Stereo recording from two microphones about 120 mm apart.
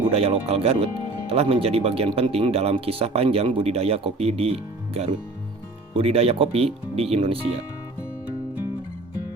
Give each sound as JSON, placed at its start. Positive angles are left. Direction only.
{"t": 0.1, "sound": "speech", "side_deg": -55}